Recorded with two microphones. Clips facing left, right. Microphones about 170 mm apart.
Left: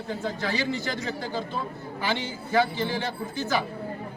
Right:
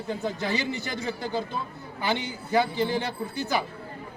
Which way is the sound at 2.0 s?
15° right (ahead or behind).